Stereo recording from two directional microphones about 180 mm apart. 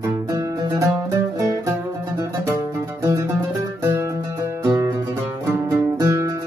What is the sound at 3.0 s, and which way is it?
Music, 15° right (ahead or behind).